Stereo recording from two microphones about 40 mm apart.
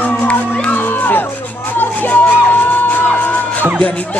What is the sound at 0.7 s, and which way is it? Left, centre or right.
Music, left.